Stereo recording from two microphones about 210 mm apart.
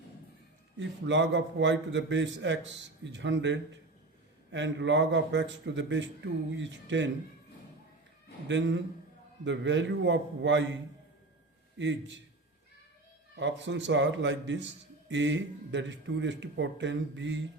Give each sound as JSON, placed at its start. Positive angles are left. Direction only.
{"t": 0.8, "sound": "a man's voice", "side_deg": -60}
{"t": 8.4, "sound": "a man's voice", "side_deg": -60}
{"t": 11.8, "sound": "a man's voice", "side_deg": -60}
{"t": 13.3, "sound": "a man's voice", "side_deg": -60}